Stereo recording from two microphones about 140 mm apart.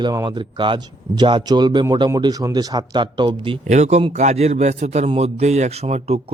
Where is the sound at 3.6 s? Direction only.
55° right (ahead or behind).